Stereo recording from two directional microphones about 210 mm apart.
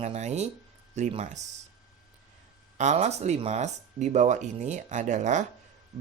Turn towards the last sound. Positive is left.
turn(degrees=-35)  # may be behind; listen again after turning